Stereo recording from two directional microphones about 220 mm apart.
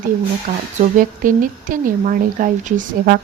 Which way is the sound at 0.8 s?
35° right (ahead or behind).